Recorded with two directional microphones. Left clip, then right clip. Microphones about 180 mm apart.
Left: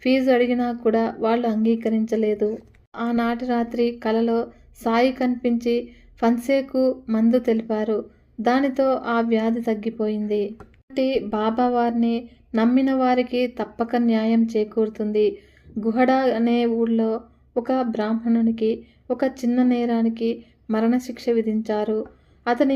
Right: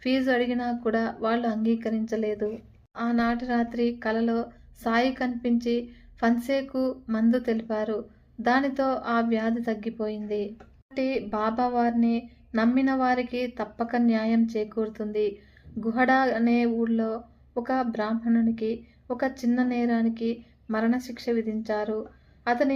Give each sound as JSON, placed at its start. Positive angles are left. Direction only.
{"t": 0.0, "sound": "a woman's voice", "side_deg": 25}